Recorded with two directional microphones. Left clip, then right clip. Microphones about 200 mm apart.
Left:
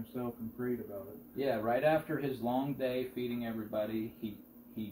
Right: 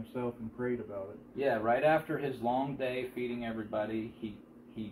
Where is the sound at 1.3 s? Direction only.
25° left (ahead or behind).